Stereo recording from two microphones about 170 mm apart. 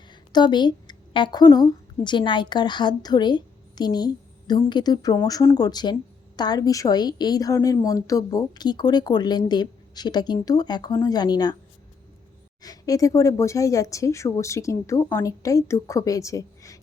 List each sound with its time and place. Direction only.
0.1 s a woman's voice: 25° left (ahead or behind)
12.6 s a woman's voice: 20° left (ahead or behind)